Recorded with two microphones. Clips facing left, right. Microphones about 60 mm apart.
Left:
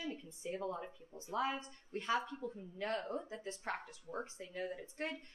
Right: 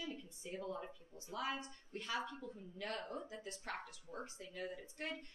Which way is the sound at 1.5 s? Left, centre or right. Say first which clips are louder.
Left 3 dB; left.